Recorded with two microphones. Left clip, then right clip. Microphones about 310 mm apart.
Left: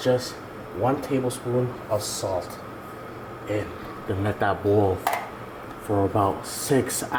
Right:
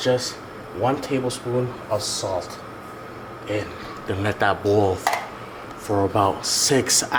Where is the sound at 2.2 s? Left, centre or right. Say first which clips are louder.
Right 2 dB; centre.